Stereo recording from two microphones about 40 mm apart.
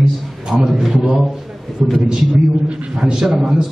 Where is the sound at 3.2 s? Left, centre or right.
Centre.